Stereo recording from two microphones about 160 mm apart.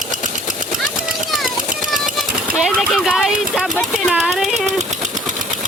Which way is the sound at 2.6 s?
Centre (ahead or behind).